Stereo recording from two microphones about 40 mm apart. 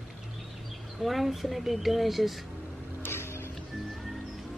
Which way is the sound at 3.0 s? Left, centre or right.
Left.